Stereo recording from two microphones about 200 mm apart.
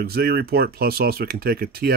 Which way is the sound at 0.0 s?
50° right (ahead or behind).